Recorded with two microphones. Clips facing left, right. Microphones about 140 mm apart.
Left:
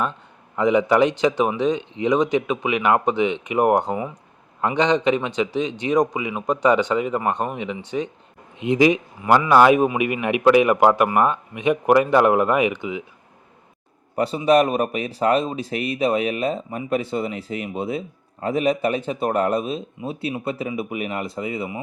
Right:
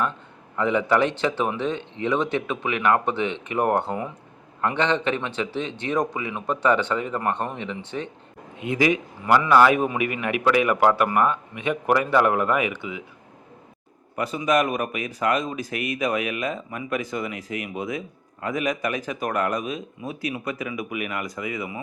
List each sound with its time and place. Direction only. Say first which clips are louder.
0.5 s a man's voice: left 4 dB; 15° left (ahead or behind)
14.2 s speech: left 5 dB; 30° left (ahead or behind)